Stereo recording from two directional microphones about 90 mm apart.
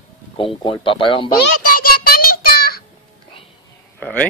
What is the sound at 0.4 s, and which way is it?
Speech, 75° left (ahead or behind).